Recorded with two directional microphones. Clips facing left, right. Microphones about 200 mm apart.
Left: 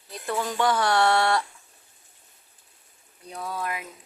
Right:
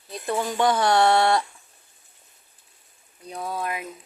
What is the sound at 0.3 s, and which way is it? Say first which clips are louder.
Speech: right 2 dB; 20° right (ahead or behind).